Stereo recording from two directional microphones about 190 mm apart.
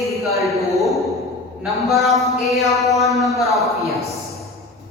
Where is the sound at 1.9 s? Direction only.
Centre (ahead or behind).